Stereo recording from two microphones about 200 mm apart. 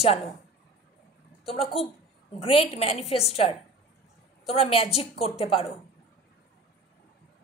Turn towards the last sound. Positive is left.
turn(degrees=30)  # may be behind; listen again after turning